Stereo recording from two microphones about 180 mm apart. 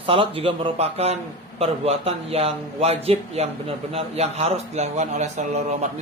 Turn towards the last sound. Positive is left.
turn(degrees=-40)  # may be behind; listen again after turning